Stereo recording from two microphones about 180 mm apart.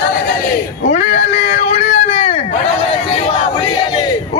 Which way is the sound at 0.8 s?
40° left (ahead or behind).